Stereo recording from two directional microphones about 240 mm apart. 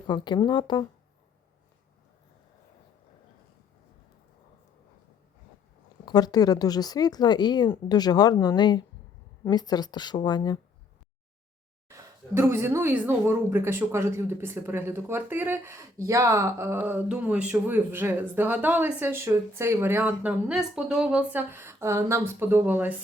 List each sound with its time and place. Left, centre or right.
0.1 s speech: centre
6.1 s a woman's voice: centre
11.9 s speech: centre